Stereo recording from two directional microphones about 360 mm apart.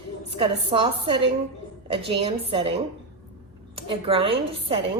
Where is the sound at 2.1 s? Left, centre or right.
Centre.